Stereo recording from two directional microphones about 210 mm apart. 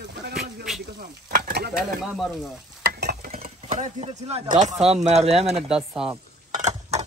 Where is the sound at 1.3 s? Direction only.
45° right (ahead or behind).